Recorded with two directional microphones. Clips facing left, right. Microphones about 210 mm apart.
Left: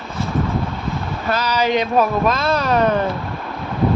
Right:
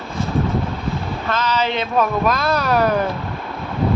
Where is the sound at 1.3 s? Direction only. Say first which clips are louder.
Left 2 dB; 10° left (ahead or behind).